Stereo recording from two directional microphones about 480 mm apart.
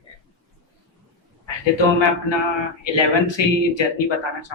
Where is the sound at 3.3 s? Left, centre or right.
Left.